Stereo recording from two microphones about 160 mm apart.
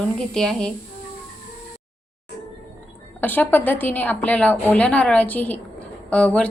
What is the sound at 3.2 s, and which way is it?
A woman's voice, 10° left (ahead or behind).